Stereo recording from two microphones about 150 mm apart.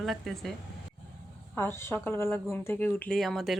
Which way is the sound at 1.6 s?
15° left (ahead or behind).